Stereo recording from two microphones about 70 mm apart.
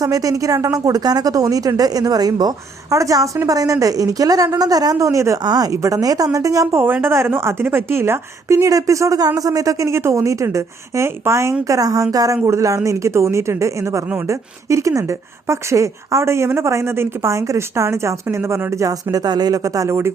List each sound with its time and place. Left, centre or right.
0.0 s a woman's voice: right
5.4 s speech: right
5.7 s a woman's voice: right
6.7 s a woman's voice: right
9.9 s speech: right
11.7 s a woman's voice: right
12.5 s speech: right
19.1 s a woman's voice: right